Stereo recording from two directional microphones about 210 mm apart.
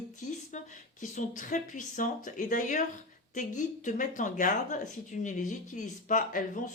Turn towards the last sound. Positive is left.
turn(degrees=40)  # may be behind; listen again after turning